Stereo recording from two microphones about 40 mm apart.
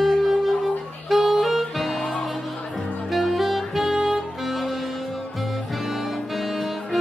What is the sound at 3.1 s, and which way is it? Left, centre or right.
Saxophone, centre.